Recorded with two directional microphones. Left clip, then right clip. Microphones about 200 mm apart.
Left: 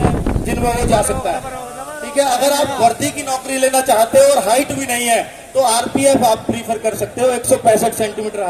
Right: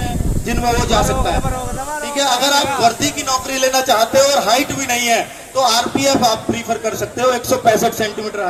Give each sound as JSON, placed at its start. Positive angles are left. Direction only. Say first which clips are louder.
{"t": 0.6, "sound": "speech", "louder": "even", "side_deg": 55}
{"t": 2.1, "sound": "speech", "louder": "left 1 dB", "side_deg": 55}